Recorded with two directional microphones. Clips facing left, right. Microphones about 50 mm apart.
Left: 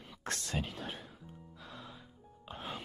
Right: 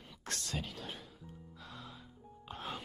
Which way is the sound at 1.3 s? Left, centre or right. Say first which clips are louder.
Right 1 dB; centre.